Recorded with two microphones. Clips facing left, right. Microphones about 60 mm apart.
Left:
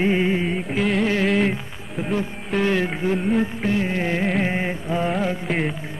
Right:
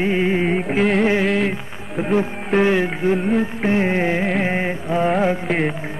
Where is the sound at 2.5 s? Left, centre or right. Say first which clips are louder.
Right 4 dB; centre.